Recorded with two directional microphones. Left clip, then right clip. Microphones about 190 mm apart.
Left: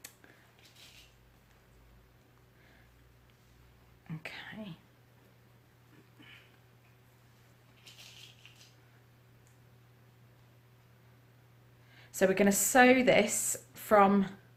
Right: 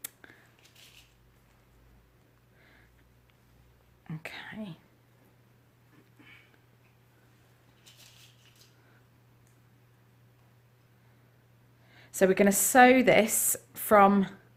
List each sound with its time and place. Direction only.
4.0 s speech: 35° right (ahead or behind)
11.9 s speech: 30° right (ahead or behind)